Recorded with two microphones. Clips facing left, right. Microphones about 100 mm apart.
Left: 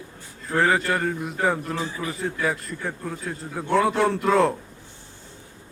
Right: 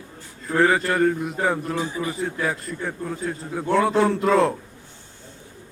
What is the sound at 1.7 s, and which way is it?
Speech, 15° right (ahead or behind).